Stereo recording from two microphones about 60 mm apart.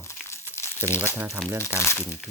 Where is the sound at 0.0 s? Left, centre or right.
Left.